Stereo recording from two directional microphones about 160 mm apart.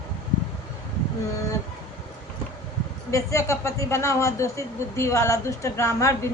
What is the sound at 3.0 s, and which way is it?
A woman's voice, 20° left (ahead or behind).